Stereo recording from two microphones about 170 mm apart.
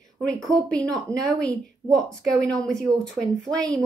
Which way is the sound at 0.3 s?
5° left (ahead or behind).